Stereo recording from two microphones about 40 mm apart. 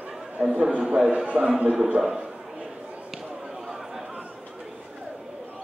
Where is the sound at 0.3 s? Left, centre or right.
Right.